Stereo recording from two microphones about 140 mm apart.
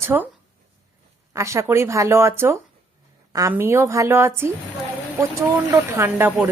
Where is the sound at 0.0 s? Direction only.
15° right (ahead or behind).